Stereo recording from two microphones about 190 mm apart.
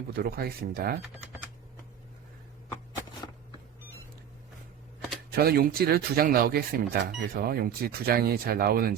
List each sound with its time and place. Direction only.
0.1 s speech: 55° right (ahead or behind)
5.3 s speech: 55° right (ahead or behind)